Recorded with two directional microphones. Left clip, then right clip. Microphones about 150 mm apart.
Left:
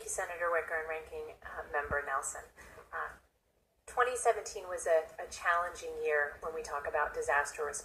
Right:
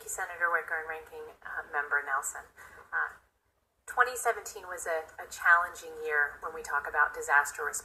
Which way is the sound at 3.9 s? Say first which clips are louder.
Right 2 dB; 25° right (ahead or behind).